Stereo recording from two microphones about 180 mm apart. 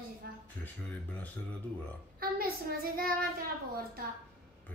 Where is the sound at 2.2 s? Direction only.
55° right (ahead or behind).